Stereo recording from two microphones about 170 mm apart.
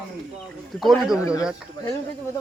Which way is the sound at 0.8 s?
Centre (ahead or behind).